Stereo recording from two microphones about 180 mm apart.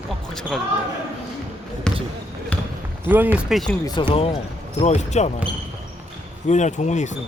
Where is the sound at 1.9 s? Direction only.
5° left (ahead or behind).